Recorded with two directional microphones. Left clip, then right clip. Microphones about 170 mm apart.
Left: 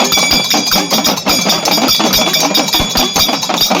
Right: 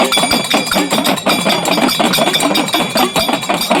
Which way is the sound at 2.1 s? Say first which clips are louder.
Left 1 dB; 55° left (ahead or behind).